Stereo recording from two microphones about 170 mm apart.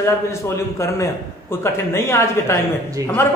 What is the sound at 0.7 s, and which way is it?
A man's voice, 15° left (ahead or behind).